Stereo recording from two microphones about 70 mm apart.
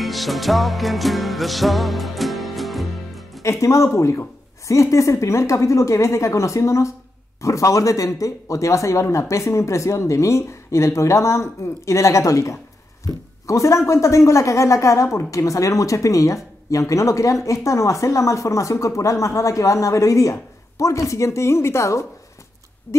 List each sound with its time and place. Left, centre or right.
0.0 s music: centre
3.4 s a woman's voice: left
22.9 s owl: left